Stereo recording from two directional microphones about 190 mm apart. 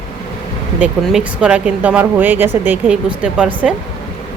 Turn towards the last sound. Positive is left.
turn(degrees=-5)  # may be behind; listen again after turning